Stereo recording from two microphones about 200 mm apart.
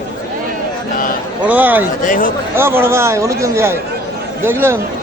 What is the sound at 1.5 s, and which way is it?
Speech, 10° right (ahead or behind).